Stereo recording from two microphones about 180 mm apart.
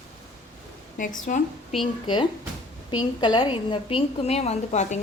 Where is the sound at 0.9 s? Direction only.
50° left (ahead or behind).